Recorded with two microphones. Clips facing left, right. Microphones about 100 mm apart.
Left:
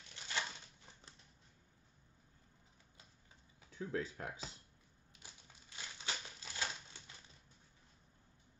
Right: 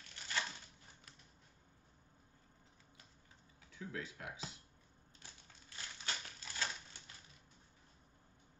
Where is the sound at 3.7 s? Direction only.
35° left (ahead or behind).